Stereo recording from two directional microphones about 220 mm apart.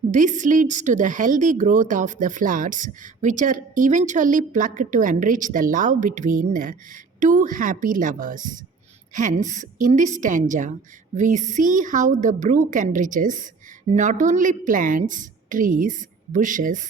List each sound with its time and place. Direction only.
0.1 s speech: 35° right (ahead or behind)